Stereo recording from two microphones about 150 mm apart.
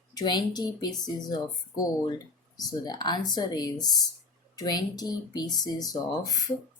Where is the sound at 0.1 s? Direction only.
25° left (ahead or behind).